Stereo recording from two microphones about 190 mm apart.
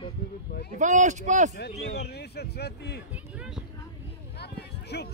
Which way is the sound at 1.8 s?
60° left (ahead or behind).